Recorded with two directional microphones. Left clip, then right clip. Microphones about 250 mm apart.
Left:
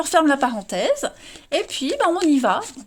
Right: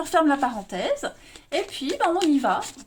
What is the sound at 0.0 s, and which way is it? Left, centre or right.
Speech, left.